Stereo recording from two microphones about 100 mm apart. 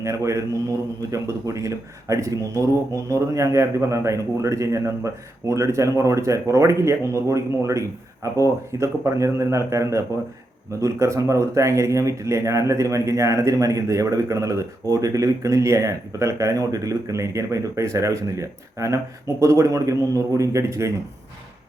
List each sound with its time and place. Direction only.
0.0 s speech: 30° right (ahead or behind)